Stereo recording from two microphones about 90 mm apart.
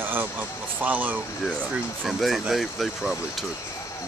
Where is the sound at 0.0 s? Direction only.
20° right (ahead or behind).